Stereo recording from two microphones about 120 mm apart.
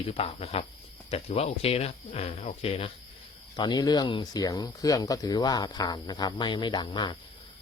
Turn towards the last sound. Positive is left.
turn(degrees=40)  # may be behind; listen again after turning